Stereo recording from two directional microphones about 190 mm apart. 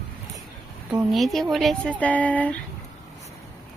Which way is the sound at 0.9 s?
Centre (ahead or behind).